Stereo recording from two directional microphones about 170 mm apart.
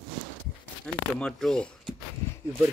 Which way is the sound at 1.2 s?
5° left (ahead or behind).